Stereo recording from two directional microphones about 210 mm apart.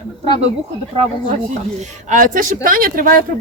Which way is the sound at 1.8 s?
35° right (ahead or behind).